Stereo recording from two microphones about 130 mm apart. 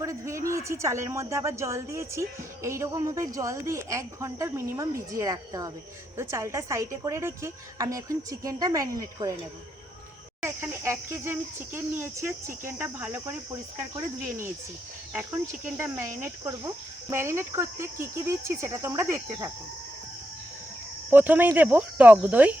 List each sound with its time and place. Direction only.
0.0 s speech: 25° right (ahead or behind)
10.4 s speech: 20° right (ahead or behind)
16.2 s speech: 25° right (ahead or behind)
21.1 s speech: 15° right (ahead or behind)